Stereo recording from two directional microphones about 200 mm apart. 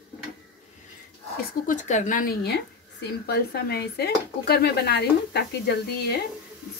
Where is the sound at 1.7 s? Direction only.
40° left (ahead or behind).